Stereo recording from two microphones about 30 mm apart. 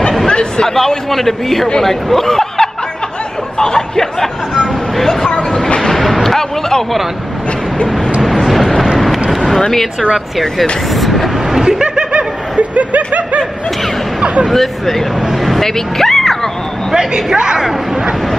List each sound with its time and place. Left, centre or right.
0.3 s chatter: left
0.7 s speech: centre
3.5 s a sound: left
8.2 s vehicle: centre
8.9 s a sound: centre
10.6 s speech: centre
11.8 s a sound: right
12.5 s snicker: right
14.2 s speech: right
14.5 s speech: centre
16.9 s speech: right